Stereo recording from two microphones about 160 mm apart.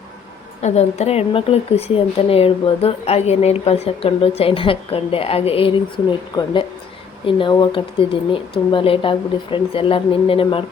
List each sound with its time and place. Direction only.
0.6 s speech: 45° left (ahead or behind)